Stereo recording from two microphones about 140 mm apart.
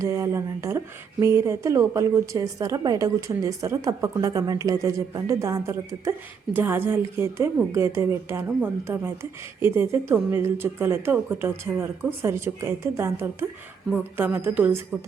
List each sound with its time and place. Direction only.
0.0 s a woman's voice: 20° right (ahead or behind)